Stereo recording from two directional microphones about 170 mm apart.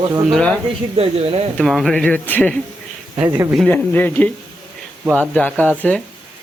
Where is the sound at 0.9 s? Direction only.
35° right (ahead or behind).